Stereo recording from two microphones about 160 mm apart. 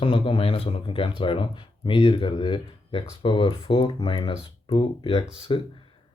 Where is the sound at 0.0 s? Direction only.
30° left (ahead or behind).